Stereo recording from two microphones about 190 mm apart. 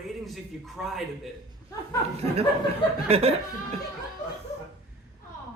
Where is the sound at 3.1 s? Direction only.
30° right (ahead or behind).